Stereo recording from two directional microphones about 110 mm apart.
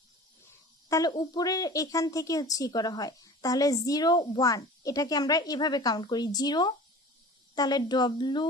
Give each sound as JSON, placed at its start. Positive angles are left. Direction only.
{"t": 0.9, "sound": "speech", "side_deg": 35}